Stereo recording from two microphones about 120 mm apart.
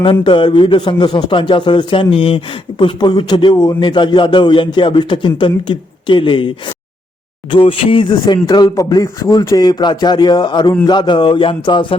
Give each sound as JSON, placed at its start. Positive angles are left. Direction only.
{"t": 0.0, "sound": "a man's voice", "side_deg": 45}
{"t": 7.5, "sound": "speech", "side_deg": 50}